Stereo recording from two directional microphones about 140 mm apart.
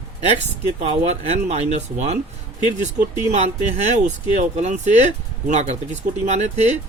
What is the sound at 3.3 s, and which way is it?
Speech, 55° right (ahead or behind).